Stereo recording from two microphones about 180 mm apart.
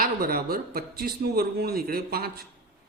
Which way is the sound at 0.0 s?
55° right (ahead or behind).